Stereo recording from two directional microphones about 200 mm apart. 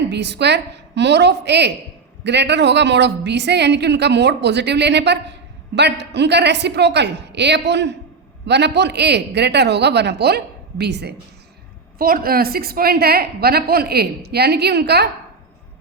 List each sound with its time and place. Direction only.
0.1 s a woman's voice: 60° right (ahead or behind)